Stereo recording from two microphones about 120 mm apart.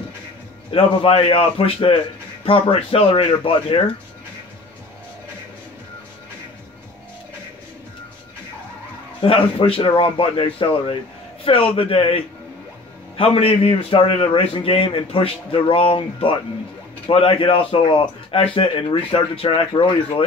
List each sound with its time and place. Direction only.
0.7 s a man's voice: 50° left (ahead or behind)
9.2 s a man's voice: 50° left (ahead or behind)